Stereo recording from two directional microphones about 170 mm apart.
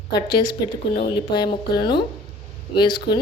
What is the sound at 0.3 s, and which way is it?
Speech, 25° left (ahead or behind).